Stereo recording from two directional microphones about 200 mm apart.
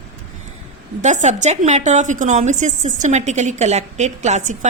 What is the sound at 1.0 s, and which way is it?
A woman's voice, 35° right (ahead or behind).